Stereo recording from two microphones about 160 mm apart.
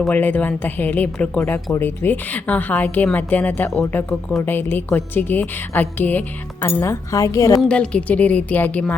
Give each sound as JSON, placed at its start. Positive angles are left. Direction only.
{"t": 0.1, "sound": "a woman's voice", "side_deg": 10}
{"t": 7.6, "sound": "a woman's voice", "side_deg": 5}